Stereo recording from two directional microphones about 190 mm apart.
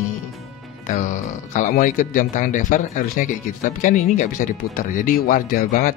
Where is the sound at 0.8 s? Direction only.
40° left (ahead or behind).